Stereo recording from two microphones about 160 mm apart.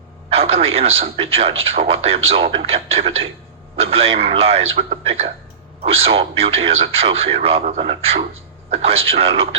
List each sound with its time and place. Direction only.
0.3 s a man's voice: 40° right (ahead or behind)